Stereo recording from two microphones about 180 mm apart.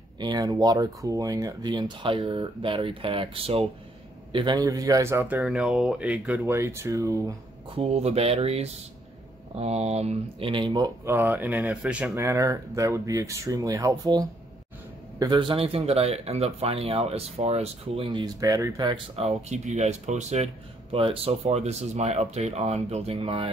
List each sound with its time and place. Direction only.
0.2 s speech: 20° right (ahead or behind)
7.7 s speech: 35° right (ahead or behind)
11.1 s speech: 10° right (ahead or behind)
12.2 s speech: 15° right (ahead or behind)
19.1 s speech: 40° right (ahead or behind)